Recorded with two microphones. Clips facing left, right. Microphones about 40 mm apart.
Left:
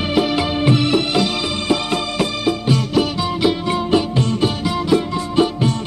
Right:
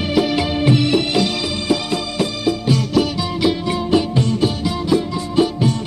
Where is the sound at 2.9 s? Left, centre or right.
Centre.